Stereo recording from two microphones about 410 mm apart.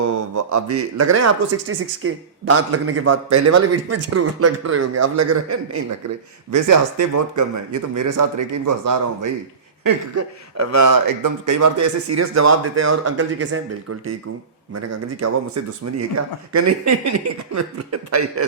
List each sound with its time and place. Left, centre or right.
0.0 s a man's voice: right
7.1 s a man's voice: right
14.7 s a man's voice: right